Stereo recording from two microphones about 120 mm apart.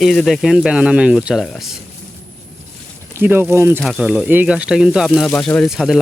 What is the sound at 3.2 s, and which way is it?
Speech, 20° right (ahead or behind).